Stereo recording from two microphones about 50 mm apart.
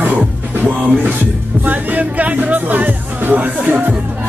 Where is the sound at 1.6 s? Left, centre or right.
Right.